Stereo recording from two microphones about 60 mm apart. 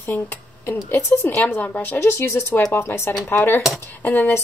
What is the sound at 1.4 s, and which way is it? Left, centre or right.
Speech, left.